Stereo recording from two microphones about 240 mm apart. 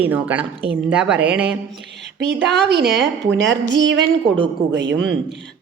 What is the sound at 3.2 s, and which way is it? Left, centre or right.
A woman's voice, right.